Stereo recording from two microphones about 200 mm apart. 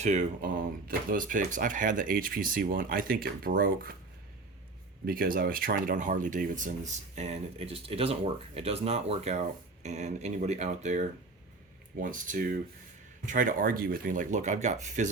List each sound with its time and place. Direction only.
0.0 s speech: 35° right (ahead or behind)
5.0 s speech: 45° right (ahead or behind)